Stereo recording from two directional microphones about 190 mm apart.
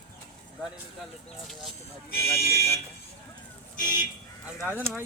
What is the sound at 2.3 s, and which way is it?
Speech, 55° left (ahead or behind).